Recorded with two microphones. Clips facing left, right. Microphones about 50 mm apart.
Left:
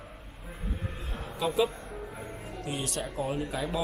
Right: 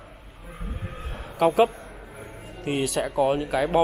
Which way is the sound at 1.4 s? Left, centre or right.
Right.